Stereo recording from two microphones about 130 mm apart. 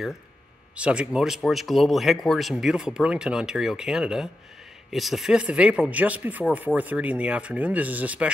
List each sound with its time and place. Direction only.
0.7 s speech: 10° right (ahead or behind)